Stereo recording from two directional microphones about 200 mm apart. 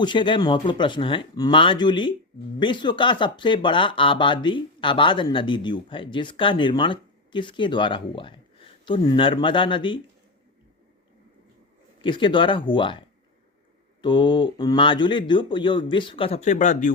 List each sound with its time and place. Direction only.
0.0 s speech: 25° left (ahead or behind)
12.0 s speech: 25° left (ahead or behind)
14.0 s speech: 25° left (ahead or behind); by 16.9 s 40° left (ahead or behind)